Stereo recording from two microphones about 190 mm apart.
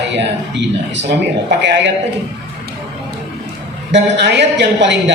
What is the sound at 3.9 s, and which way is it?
A man's voice, 65° right (ahead or behind).